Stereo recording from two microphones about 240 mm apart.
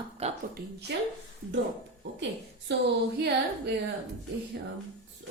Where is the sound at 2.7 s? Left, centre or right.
Right.